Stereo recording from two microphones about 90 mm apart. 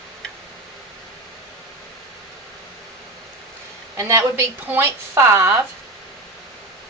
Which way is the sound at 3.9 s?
35° right (ahead or behind).